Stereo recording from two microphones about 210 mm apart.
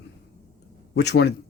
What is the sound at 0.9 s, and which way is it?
Speech, 50° left (ahead or behind).